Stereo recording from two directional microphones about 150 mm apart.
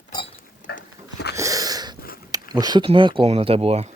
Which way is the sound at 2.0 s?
75° left (ahead or behind).